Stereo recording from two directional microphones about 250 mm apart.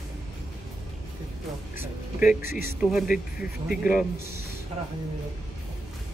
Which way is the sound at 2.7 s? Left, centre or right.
Centre.